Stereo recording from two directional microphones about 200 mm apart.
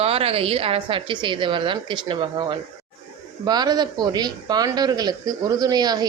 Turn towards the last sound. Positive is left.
turn(degrees=-20)  # may be behind; listen again after turning